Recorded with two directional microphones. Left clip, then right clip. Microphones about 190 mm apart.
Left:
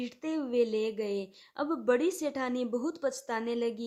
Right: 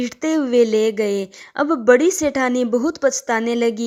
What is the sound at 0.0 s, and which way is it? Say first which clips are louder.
A woman's voice: right 14 dB; 40° right (ahead or behind).